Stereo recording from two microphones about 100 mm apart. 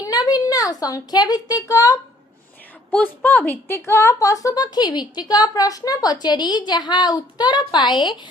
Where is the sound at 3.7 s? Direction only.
25° left (ahead or behind).